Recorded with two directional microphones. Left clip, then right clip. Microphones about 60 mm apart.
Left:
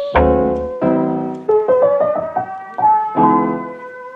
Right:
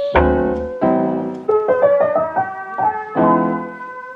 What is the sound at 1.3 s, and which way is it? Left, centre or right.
Music, right.